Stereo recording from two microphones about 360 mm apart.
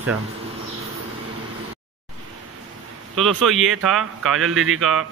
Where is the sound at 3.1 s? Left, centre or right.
Centre.